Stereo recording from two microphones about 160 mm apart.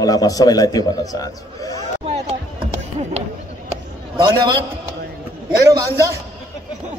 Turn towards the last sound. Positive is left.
turn(degrees=-20)  # may be behind; listen again after turning